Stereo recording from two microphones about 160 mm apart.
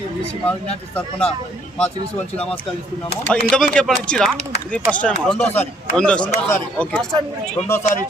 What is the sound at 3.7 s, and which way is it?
Speech, 5° left (ahead or behind).